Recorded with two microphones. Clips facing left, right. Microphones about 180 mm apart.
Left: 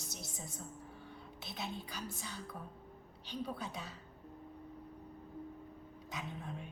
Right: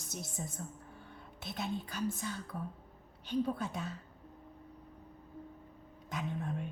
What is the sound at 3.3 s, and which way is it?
Speech, 50° right (ahead or behind).